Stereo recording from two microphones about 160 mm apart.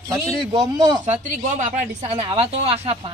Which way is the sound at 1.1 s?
50° right (ahead or behind).